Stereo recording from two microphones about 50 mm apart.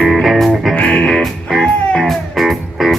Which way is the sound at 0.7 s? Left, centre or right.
Left.